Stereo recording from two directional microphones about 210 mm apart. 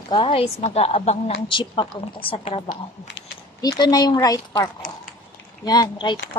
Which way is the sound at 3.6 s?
15° left (ahead or behind).